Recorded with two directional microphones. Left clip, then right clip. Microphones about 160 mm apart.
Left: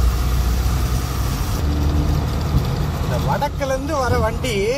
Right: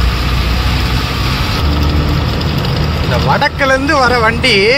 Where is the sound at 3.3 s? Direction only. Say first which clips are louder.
Right 10 dB; 5° right (ahead or behind).